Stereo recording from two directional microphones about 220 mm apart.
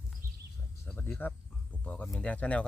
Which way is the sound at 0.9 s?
10° left (ahead or behind).